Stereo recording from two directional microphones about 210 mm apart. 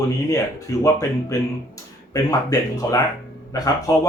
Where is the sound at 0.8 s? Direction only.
15° left (ahead or behind).